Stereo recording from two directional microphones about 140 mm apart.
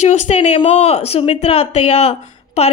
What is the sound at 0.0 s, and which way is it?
A woman's voice, 55° left (ahead or behind).